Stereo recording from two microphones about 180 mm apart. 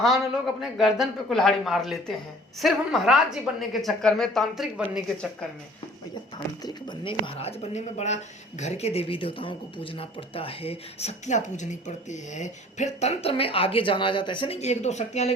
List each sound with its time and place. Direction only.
0.6 s a woman's voice: centre (ahead or behind)
6.6 s speech: 25° left (ahead or behind); by 15.3 s 40° left (ahead or behind)